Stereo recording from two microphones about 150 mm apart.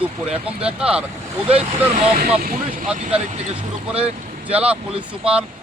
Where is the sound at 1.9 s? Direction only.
50° right (ahead or behind).